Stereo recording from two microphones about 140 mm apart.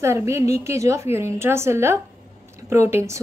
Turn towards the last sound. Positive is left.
turn(degrees=-20)  # may be behind; listen again after turning